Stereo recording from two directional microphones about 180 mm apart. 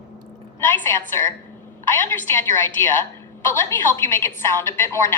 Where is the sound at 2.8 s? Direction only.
15° left (ahead or behind).